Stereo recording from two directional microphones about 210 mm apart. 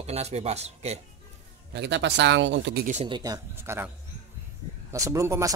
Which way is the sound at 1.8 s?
60° right (ahead or behind).